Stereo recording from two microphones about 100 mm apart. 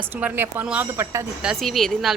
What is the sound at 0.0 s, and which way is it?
Speech, 20° right (ahead or behind).